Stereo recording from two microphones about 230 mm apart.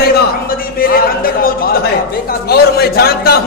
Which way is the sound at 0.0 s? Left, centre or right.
Left.